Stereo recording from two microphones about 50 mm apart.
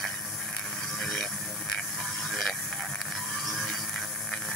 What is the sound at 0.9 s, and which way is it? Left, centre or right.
Vehicle, centre.